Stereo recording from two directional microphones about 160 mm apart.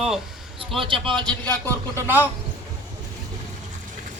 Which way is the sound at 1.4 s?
15° left (ahead or behind).